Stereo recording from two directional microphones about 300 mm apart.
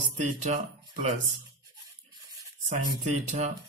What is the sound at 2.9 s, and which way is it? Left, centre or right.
Speech, right.